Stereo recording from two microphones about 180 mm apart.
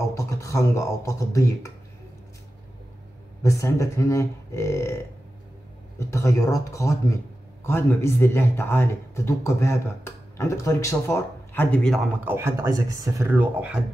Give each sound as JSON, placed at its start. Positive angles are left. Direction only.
{"t": 0.2, "sound": "speech", "side_deg": 15}
{"t": 3.4, "sound": "speech", "side_deg": 15}
{"t": 5.9, "sound": "speech", "side_deg": 15}
{"t": 12.3, "sound": "speech", "side_deg": -15}